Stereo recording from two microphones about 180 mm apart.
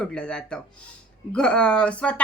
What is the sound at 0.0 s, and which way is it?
Speech, 5° left (ahead or behind).